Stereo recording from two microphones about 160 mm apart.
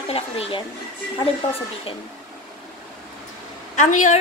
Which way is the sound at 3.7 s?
50° left (ahead or behind).